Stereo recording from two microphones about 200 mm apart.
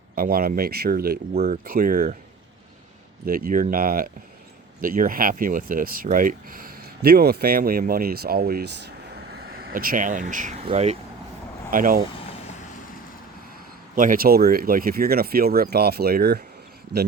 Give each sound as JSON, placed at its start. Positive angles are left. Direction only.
{"t": 0.2, "sound": "speech", "side_deg": -50}
{"t": 3.2, "sound": "speech", "side_deg": -45}
{"t": 11.7, "sound": "speech", "side_deg": -45}
{"t": 13.9, "sound": "speech", "side_deg": -45}